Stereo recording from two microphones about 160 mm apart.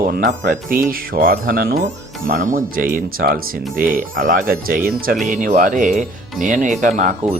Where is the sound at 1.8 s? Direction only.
55° right (ahead or behind).